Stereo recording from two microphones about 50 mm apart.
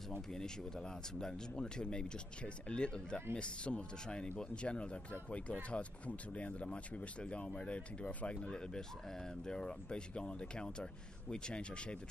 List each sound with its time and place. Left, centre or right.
0.3 s speech: centre